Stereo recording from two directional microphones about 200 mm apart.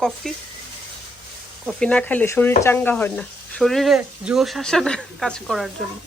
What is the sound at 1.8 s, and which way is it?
Speech, 5° left (ahead or behind).